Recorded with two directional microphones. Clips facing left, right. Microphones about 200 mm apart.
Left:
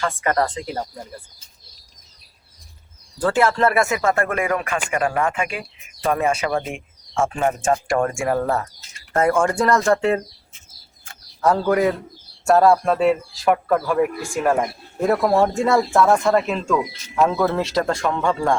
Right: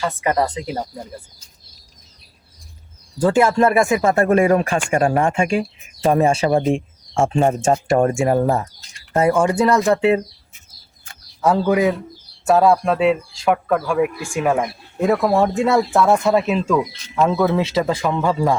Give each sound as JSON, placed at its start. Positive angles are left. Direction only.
{"t": 0.0, "sound": "speech", "side_deg": -10}
{"t": 3.2, "sound": "speech", "side_deg": -15}
{"t": 8.8, "sound": "bird", "side_deg": 5}
{"t": 9.1, "sound": "speech", "side_deg": -10}
{"t": 11.3, "sound": "speech", "side_deg": -5}